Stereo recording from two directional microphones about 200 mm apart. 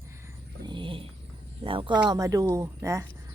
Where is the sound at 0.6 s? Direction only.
25° right (ahead or behind).